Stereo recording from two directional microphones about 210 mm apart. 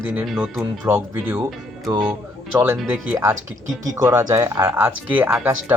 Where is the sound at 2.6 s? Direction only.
10° right (ahead or behind).